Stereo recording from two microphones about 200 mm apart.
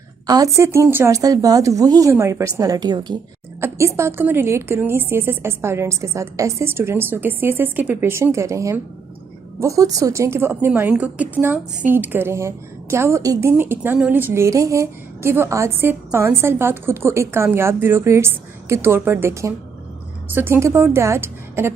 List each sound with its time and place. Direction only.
0.3 s a woman's voice: 15° right (ahead or behind)